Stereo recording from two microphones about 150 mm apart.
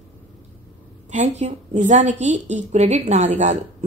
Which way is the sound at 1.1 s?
50° right (ahead or behind).